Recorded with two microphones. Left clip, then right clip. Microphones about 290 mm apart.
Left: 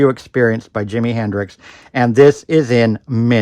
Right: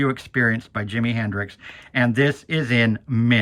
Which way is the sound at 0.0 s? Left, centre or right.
Centre.